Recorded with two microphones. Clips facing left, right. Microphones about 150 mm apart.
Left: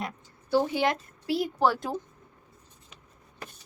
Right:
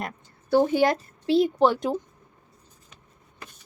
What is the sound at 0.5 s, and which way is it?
Speech, 40° right (ahead or behind).